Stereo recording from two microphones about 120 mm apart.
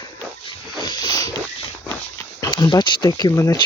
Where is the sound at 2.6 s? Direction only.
40° left (ahead or behind).